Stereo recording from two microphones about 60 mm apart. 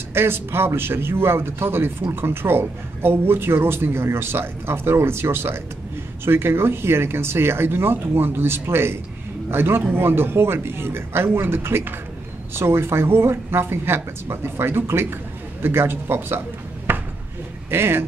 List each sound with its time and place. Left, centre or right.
0.1 s a man's voice: right